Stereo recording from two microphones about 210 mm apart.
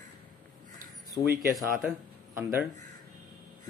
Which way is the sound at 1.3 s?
Centre (ahead or behind).